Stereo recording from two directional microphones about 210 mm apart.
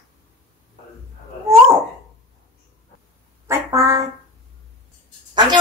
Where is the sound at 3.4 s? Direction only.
15° right (ahead or behind).